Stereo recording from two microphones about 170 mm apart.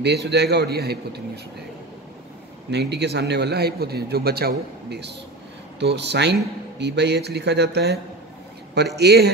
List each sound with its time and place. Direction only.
0.0 s a man's voice: 80° right
2.7 s a man's voice: 80° right